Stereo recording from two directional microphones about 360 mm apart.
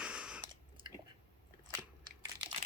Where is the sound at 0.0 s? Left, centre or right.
Centre.